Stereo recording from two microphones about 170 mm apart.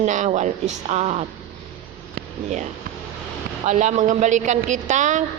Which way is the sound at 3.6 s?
45° right (ahead or behind).